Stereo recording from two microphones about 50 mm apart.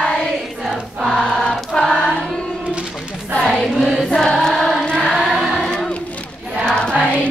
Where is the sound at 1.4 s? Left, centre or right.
Centre.